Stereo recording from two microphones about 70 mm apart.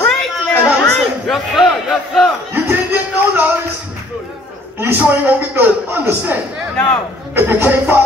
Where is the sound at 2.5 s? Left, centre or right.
Right.